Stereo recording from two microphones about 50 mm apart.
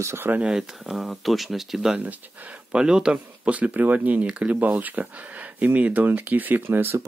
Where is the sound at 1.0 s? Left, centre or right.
Centre.